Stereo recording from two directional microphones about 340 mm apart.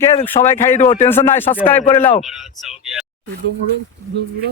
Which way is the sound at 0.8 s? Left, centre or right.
Left.